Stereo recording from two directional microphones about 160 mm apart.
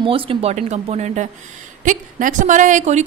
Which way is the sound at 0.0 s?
35° right (ahead or behind).